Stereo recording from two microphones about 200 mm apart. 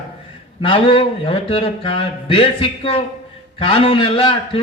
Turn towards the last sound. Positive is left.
turn(degrees=25)  # may be behind; listen again after turning